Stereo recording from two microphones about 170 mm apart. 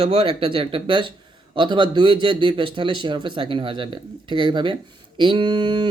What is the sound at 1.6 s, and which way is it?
Mantra, 25° right (ahead or behind).